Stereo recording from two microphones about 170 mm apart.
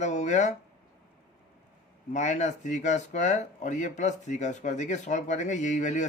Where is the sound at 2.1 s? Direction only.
45° left (ahead or behind).